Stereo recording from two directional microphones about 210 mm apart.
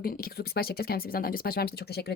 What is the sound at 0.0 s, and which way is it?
Speech, 45° left (ahead or behind).